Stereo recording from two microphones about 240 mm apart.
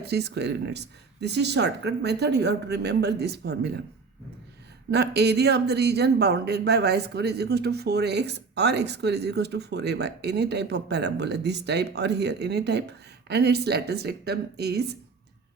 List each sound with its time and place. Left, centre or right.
0.0 s speech: right
4.9 s speech: right